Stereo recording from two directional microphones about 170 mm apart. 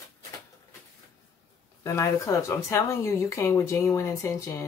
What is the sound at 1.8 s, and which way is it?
Speech, 20° left (ahead or behind).